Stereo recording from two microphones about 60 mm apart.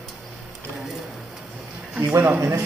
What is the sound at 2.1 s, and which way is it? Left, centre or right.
Speech, right.